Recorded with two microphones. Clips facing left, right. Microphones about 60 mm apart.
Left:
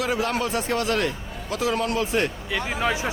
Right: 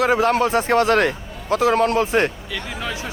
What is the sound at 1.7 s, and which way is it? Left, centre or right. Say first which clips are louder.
Speech: right 7 dB; right.